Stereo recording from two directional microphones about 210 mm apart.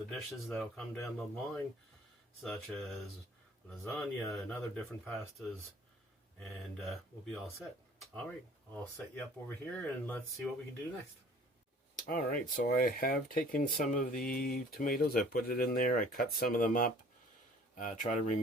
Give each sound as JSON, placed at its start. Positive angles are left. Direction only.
{"t": 0.1, "sound": "speech", "side_deg": 0}
{"t": 11.9, "sound": "speech", "side_deg": 40}